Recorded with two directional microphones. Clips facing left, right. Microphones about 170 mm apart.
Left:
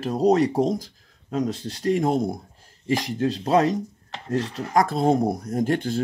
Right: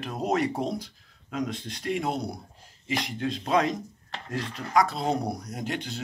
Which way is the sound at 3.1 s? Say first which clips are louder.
Left 5 dB; 35° left (ahead or behind).